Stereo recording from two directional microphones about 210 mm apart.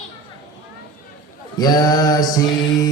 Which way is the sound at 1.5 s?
20° left (ahead or behind).